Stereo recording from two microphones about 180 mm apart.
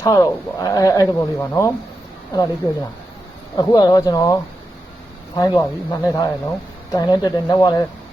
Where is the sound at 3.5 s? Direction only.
20° left (ahead or behind).